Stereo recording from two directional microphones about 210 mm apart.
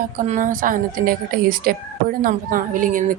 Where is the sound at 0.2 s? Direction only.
40° right (ahead or behind).